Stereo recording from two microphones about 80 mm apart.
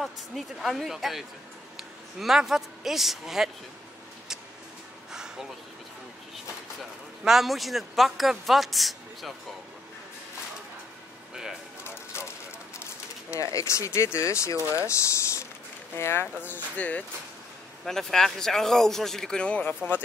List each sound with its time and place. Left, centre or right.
0.0 s speech: centre
5.1 s a sound: centre
7.2 s speech: centre
11.8 s a sound: left
13.3 s speech: left; by 17.0 s centre
17.8 s speech: centre